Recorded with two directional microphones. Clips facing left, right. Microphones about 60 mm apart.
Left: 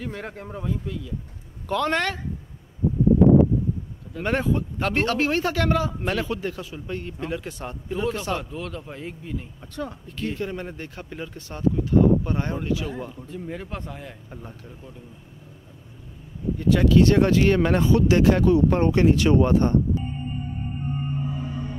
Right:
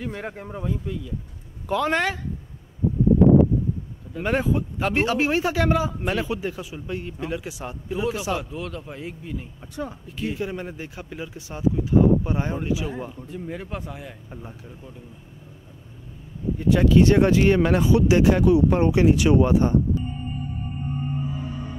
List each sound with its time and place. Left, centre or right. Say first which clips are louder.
0.0 s speech: right 1 dB; centre
4.1 s a man's voice: right 1 dB; centre
16.5 s speech: right 1 dB; centre
17.6 s speech: right 1 dB; centre